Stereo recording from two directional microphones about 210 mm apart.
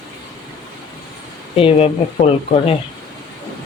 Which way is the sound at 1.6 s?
30° left (ahead or behind).